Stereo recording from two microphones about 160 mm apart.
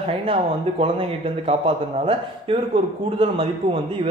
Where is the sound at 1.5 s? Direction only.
35° right (ahead or behind).